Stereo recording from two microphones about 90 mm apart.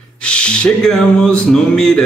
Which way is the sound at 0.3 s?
10° left (ahead or behind).